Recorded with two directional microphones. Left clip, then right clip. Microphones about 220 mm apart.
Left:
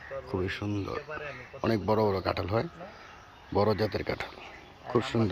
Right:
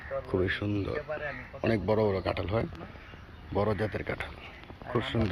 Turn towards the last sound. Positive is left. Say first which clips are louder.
# left 2 dB
turn(degrees=30)  # may be behind; listen again after turning